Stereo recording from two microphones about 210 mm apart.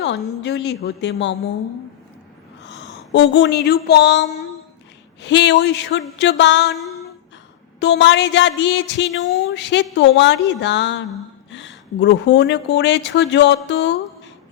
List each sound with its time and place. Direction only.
0.0 s speech: 55° left (ahead or behind)
2.6 s speech: 55° left (ahead or behind)
5.2 s speech: 55° left (ahead or behind)
7.8 s speech: 60° left (ahead or behind)